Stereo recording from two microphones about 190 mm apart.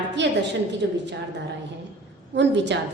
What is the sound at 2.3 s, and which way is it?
Speech, 65° right (ahead or behind).